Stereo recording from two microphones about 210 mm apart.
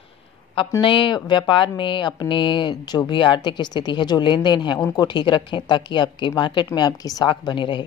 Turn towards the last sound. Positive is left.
turn(degrees=20)  # may be behind; listen again after turning